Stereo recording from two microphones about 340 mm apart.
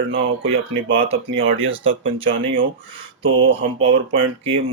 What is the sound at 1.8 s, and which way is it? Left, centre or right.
Speech, centre.